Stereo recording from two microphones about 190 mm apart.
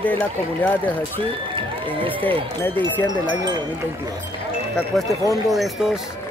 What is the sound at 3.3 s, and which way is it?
Speech, 20° right (ahead or behind).